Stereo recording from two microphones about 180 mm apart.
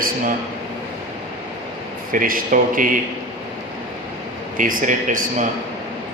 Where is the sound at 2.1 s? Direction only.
50° right (ahead or behind).